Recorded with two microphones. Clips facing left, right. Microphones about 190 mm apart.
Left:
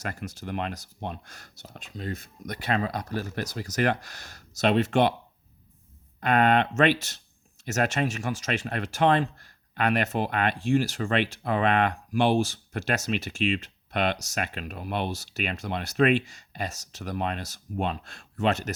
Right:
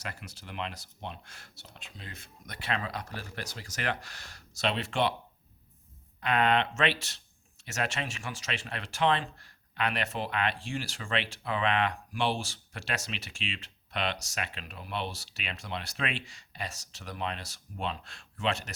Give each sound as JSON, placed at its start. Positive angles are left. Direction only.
{"t": 0.0, "sound": "speech", "side_deg": 45}
{"t": 6.1, "sound": "speech", "side_deg": 50}